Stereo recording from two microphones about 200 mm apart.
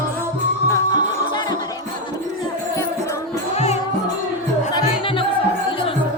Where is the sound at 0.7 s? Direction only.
20° left (ahead or behind).